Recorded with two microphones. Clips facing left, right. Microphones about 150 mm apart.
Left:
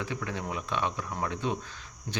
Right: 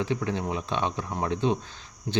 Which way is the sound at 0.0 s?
30° right (ahead or behind).